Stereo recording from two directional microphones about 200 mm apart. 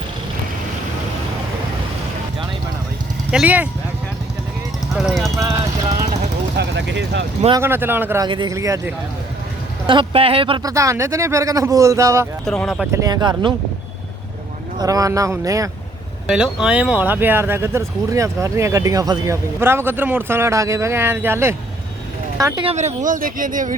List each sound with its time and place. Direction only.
3.3 s speech: 5° right (ahead or behind)
4.9 s speech: centre (ahead or behind)
6.6 s speech: 60° right (ahead or behind)
7.6 s speech: 10° right (ahead or behind)
9.8 s speech: 25° right (ahead or behind)
12.5 s speech: centre (ahead or behind)
12.9 s speech: 15° right (ahead or behind)
14.8 s speech: 15° right (ahead or behind)
16.2 s speech: 5° right (ahead or behind); by 23.7 s 40° right (ahead or behind)